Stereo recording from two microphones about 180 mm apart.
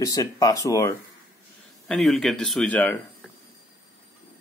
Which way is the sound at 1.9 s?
Centre (ahead or behind).